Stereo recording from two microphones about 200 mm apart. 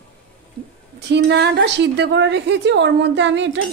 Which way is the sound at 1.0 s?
60° right (ahead or behind).